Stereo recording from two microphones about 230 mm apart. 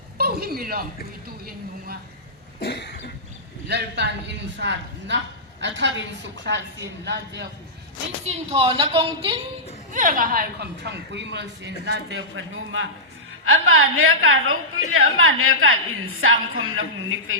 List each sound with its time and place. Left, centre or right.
0.2 s a sound: right
2.6 s cough: left
3.7 s a woman's voice: right
8.2 s a woman's voice: right
9.9 s a woman's voice: right